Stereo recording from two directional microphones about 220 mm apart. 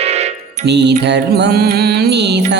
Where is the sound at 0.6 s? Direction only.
50° right (ahead or behind).